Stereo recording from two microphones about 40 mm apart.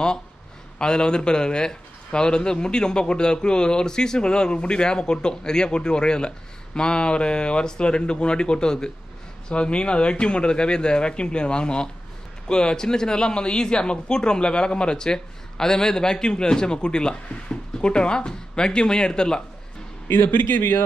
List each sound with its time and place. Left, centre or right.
0.7 s speech: left
20.1 s a man's voice: left